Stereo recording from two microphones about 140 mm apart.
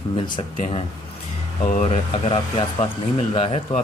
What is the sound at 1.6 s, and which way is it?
Speech, 50° left (ahead or behind).